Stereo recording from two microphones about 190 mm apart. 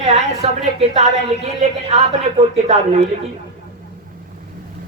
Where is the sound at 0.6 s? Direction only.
35° right (ahead or behind).